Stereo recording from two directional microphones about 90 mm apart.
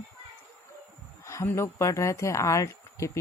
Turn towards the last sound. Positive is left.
turn(degrees=35)  # may be behind; listen again after turning